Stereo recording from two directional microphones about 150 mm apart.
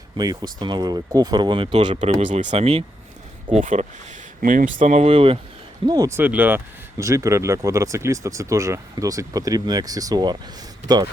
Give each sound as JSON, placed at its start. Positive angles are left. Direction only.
{"t": 0.2, "sound": "speech", "side_deg": -25}
{"t": 2.0, "sound": "speech", "side_deg": -50}
{"t": 3.5, "sound": "speech", "side_deg": -55}
{"t": 5.9, "sound": "speech", "side_deg": -20}